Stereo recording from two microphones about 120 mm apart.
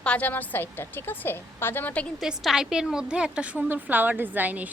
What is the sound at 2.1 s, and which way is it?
A woman's voice, centre (ahead or behind).